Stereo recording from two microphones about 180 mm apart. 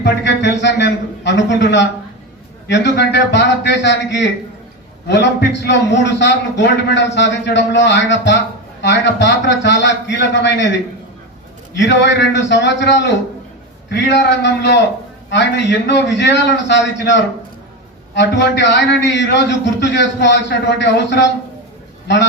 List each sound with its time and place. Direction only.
0.0 s a man's voice: 75° left (ahead or behind)
11.7 s a man's voice: 75° left (ahead or behind)